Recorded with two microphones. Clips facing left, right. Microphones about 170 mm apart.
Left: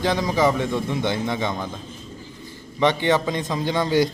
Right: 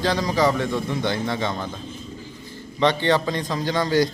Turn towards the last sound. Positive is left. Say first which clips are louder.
# even
turn(degrees=20)  # may be behind; listen again after turning